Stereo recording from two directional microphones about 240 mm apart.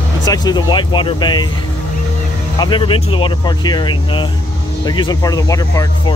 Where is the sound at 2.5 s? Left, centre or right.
Centre.